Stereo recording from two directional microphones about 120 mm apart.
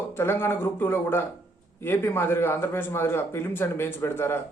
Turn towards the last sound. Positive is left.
turn(degrees=20)  # may be behind; listen again after turning